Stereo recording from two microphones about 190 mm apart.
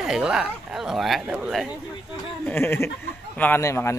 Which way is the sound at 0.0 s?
5° right (ahead or behind).